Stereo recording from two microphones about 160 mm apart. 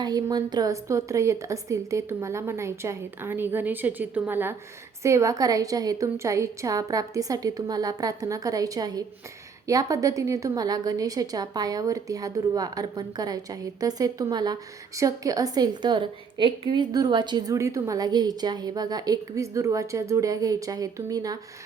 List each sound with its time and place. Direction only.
0.0 s a woman's voice: 25° right (ahead or behind)